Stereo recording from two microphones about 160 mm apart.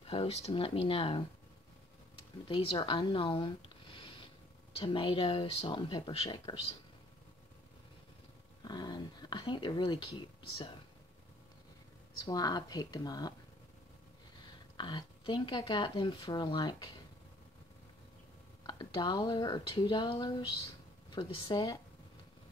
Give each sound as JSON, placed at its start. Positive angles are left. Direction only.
{"t": 0.0, "sound": "speech", "side_deg": 40}
{"t": 2.4, "sound": "speech", "side_deg": 30}
{"t": 8.6, "sound": "speech", "side_deg": 25}
{"t": 12.3, "sound": "speech", "side_deg": 25}
{"t": 14.8, "sound": "speech", "side_deg": 30}
{"t": 18.7, "sound": "speech", "side_deg": 30}